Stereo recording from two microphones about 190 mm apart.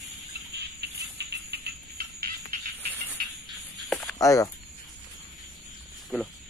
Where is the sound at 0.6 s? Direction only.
60° right (ahead or behind).